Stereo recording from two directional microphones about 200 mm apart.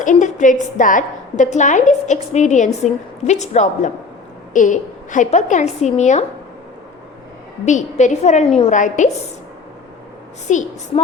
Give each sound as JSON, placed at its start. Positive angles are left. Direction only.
{"t": 0.0, "sound": "a woman's voice", "side_deg": 40}
{"t": 7.6, "sound": "a woman's voice", "side_deg": 35}
{"t": 10.5, "sound": "a woman's voice", "side_deg": 35}